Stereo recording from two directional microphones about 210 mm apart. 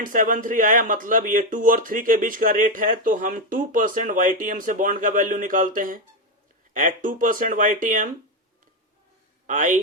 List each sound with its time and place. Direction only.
0.0 s speech: 40° right (ahead or behind)
9.5 s speech: 40° right (ahead or behind)